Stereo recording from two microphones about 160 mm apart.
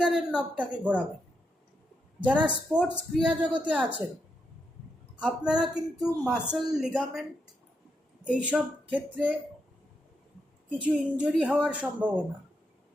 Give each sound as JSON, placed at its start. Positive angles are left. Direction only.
{"t": 0.0, "sound": "speech", "side_deg": -5}
{"t": 2.7, "sound": "speech", "side_deg": -5}
{"t": 5.2, "sound": "a man's voice", "side_deg": -5}
{"t": 8.3, "sound": "speech", "side_deg": -5}
{"t": 10.8, "sound": "speech", "side_deg": -5}